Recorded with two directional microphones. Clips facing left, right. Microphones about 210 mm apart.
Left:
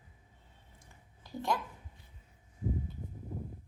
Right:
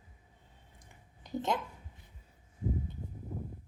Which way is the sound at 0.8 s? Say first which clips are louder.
Right 2 dB; 20° right (ahead or behind).